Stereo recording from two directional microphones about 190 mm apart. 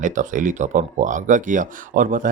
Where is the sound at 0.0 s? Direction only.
40° right (ahead or behind).